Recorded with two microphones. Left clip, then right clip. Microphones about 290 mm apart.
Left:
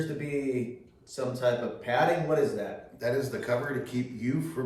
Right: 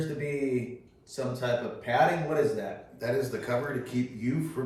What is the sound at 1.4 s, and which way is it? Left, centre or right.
A man's voice, centre.